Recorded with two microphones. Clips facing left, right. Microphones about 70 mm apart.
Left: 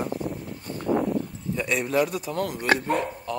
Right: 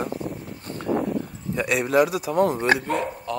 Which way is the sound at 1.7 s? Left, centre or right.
Right.